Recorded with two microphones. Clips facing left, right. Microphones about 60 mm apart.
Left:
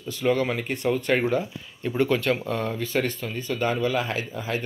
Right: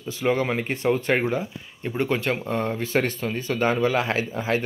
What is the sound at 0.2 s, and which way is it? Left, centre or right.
Speech, right.